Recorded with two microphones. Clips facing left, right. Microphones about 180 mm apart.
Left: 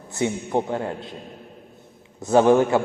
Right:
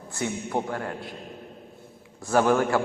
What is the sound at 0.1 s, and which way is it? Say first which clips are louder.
A man's voice: left 5 dB; 20° left (ahead or behind).